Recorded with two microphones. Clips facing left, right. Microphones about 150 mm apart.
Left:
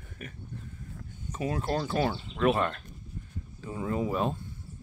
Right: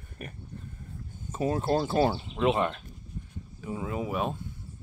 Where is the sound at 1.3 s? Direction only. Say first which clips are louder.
Right 4 dB; 30° right (ahead or behind).